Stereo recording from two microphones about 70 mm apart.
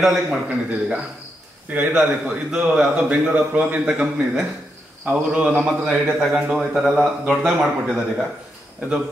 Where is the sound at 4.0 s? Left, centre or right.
Centre.